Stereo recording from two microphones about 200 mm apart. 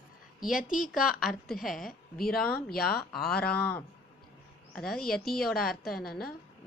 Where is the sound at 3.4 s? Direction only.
10° left (ahead or behind).